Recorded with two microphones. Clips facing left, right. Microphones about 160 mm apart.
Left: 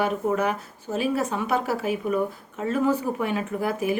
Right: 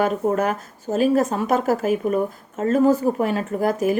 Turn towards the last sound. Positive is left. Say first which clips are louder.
# right 5 dB
turn(degrees=-40)  # may be behind; listen again after turning